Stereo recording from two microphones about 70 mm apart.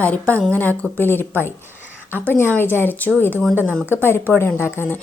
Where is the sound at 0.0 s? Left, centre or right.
Left.